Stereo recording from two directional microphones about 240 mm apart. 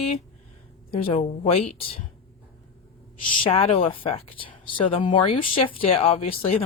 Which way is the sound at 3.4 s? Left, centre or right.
Left.